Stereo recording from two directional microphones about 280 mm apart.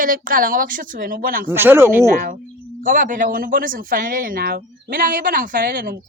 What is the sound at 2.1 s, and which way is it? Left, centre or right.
A woman's voice, right.